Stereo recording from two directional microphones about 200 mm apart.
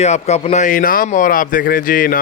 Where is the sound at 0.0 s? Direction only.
35° left (ahead or behind).